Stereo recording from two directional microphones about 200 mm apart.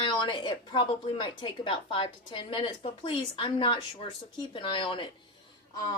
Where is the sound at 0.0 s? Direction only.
25° left (ahead or behind).